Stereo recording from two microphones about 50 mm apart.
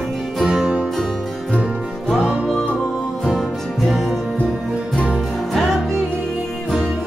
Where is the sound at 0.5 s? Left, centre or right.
Centre.